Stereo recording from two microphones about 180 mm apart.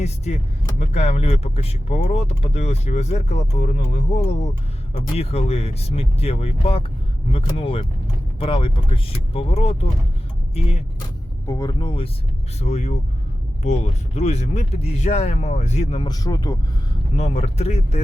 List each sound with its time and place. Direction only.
0.8 s speech: 40° left (ahead or behind)
11.4 s speech: 20° left (ahead or behind); by 16.0 s 35° left (ahead or behind)
16.0 s speech: 20° left (ahead or behind)
17.2 s speech: 40° left (ahead or behind)